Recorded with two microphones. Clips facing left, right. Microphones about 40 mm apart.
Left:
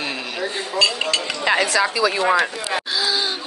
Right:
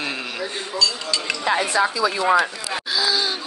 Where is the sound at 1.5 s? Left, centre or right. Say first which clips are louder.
Left 2 dB; left.